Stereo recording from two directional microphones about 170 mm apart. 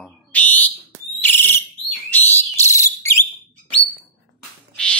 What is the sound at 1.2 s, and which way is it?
Whistle, 10° left (ahead or behind).